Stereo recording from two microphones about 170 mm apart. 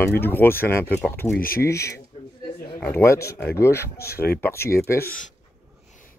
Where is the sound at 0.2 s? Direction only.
10° left (ahead or behind).